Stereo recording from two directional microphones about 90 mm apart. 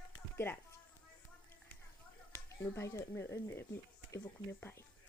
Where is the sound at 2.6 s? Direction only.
30° left (ahead or behind).